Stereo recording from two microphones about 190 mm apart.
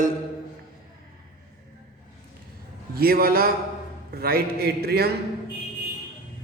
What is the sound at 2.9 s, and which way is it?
A man's voice, 50° right (ahead or behind).